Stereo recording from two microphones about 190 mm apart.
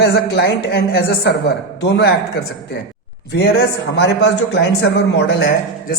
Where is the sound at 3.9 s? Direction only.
65° left (ahead or behind).